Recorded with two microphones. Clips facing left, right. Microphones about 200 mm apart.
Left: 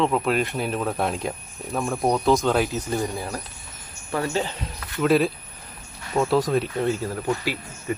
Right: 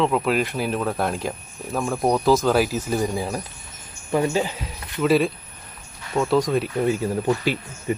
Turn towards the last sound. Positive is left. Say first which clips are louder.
# right 4 dB
turn(degrees=-25)  # may be behind; listen again after turning